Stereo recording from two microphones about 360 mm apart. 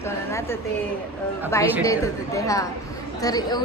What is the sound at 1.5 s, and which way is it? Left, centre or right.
A woman's voice, centre.